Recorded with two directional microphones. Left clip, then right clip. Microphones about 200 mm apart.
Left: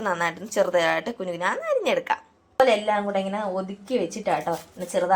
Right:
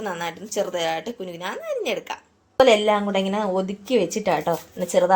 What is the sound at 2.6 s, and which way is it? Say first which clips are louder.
A woman's voice: right 4 dB; 50° right (ahead or behind).